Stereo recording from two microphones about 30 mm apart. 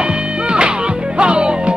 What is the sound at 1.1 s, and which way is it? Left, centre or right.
Music, right.